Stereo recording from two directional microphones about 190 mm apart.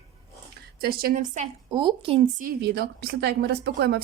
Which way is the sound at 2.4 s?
55° right (ahead or behind).